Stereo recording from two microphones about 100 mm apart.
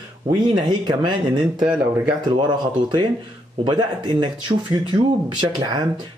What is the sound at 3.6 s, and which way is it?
Speech, 50° right (ahead or behind).